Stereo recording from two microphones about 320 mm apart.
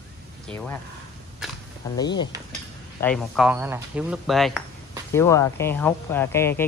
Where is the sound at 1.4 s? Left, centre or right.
Centre.